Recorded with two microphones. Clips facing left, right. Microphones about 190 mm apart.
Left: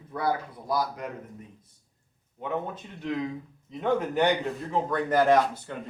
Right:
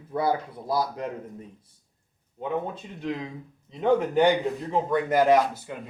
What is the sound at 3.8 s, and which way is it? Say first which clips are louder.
Speech: right 4 dB; 10° right (ahead or behind).